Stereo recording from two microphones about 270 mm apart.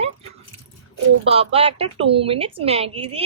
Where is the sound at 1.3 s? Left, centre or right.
Right.